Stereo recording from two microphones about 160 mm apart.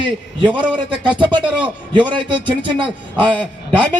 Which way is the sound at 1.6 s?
30° right (ahead or behind).